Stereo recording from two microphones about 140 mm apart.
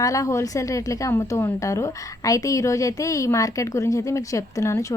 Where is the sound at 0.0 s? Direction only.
25° left (ahead or behind).